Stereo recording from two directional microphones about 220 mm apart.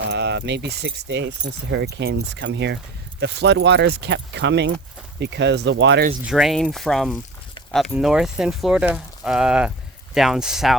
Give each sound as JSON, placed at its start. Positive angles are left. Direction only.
{"t": 0.1, "sound": "speech", "side_deg": -50}
{"t": 6.2, "sound": "speech", "side_deg": 0}